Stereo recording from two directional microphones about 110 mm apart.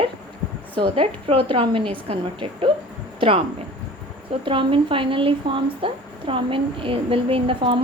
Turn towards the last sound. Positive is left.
turn(degrees=-55)  # may be behind; listen again after turning